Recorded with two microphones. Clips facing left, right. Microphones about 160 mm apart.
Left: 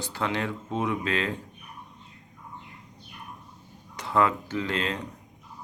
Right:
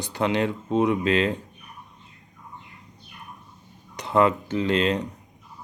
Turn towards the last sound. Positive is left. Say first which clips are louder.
# right 7 dB
turn(degrees=-20)  # may be behind; listen again after turning